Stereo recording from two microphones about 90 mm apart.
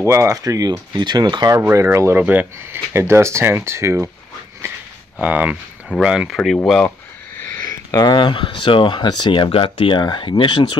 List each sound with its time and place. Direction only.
0.0 s speech: 30° right (ahead or behind); by 1.5 s 50° right (ahead or behind)
1.7 s speech: 30° right (ahead or behind)
2.1 s speech: 20° right (ahead or behind)
5.2 s speech: 15° right (ahead or behind)
5.9 s speech: 5° right (ahead or behind)
7.9 s speech: 50° left (ahead or behind); by 10.0 s 75° left (ahead or behind)
10.0 s speech: 60° left (ahead or behind)